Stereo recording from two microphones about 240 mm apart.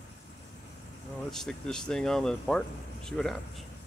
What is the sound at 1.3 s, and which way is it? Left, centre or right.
Speech, centre.